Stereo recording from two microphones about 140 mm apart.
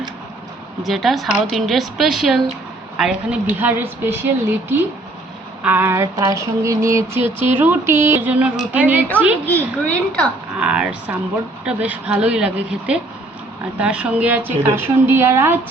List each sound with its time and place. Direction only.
0.8 s a woman's voice: centre (ahead or behind)
5.6 s a sound: 15° right (ahead or behind)
7.6 s a woman's voice: 15° right (ahead or behind)
9.5 s a child's voice: 10° left (ahead or behind)
10.6 s a woman's voice: 5° right (ahead or behind)